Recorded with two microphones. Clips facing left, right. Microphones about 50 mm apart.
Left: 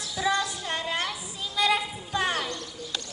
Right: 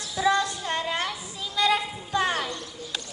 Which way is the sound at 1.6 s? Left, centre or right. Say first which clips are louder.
Right 1 dB; centre.